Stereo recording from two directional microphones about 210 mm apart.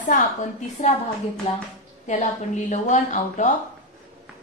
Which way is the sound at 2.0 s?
35° left (ahead or behind).